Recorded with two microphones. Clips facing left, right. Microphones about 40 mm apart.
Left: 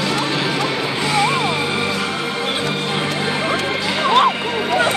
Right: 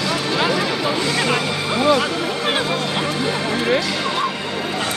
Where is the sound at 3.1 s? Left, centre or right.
Centre.